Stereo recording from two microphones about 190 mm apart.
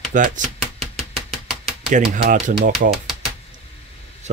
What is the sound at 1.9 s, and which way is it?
Speech, 40° right (ahead or behind).